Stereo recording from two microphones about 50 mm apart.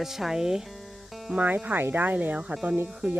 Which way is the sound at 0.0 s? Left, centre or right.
Centre.